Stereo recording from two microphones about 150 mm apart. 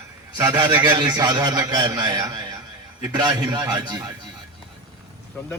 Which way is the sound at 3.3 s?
25° right (ahead or behind).